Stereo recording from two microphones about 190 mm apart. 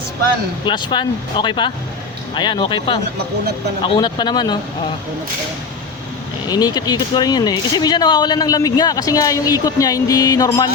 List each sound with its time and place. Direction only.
0.6 s speech: 25° left (ahead or behind)
6.5 s speech: 20° left (ahead or behind)